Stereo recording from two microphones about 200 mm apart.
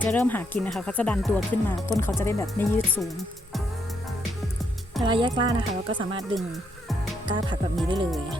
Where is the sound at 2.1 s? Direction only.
15° left (ahead or behind).